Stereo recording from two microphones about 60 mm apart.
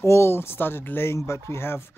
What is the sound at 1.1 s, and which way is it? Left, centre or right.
Speech, left.